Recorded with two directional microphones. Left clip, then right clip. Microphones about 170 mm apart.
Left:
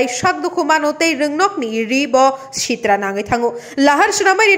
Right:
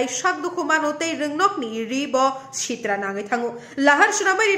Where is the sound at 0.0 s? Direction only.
30° left (ahead or behind).